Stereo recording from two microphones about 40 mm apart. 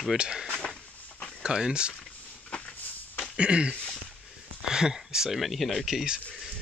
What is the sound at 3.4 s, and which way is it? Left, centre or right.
Speech, right.